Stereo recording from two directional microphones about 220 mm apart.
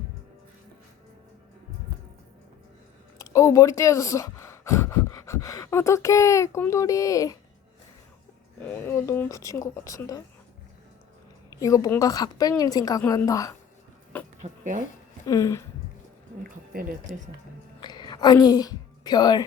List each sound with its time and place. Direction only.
3.2 s speech: 15° left (ahead or behind)
8.7 s a woman's voice: 10° left (ahead or behind)
11.5 s a woman's voice: 15° left (ahead or behind)
14.4 s speech: 35° right (ahead or behind)
15.3 s a woman's voice: 15° left (ahead or behind)
17.7 s a sound: 20° left (ahead or behind)